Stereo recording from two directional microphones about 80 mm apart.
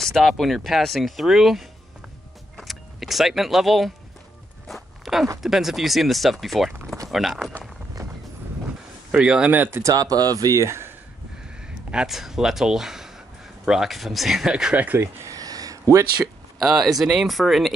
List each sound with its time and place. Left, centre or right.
0.0 s speech: centre
2.5 s power windows: centre
4.6 s walk: centre
5.4 s speech: centre
9.1 s speech: centre
9.5 s speech: right
9.8 s speech: right
11.6 s speech: centre
15.4 s a sound: right
16.5 s speech: centre